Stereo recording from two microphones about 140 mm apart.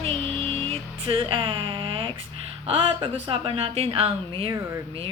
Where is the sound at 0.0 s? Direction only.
45° right (ahead or behind).